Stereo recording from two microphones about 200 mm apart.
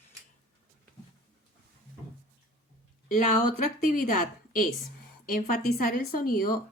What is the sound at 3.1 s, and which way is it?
A woman's voice, 40° left (ahead or behind).